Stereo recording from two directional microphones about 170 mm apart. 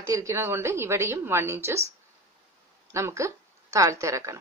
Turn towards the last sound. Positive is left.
turn(degrees=-15)  # may be behind; listen again after turning